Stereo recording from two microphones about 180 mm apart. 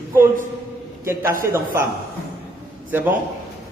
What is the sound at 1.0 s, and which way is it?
Speech, 15° right (ahead or behind).